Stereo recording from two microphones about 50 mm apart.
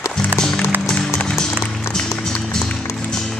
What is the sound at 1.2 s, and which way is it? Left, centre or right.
Music, centre.